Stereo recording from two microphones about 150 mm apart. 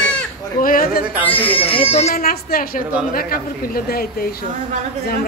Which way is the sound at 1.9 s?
45° left (ahead or behind).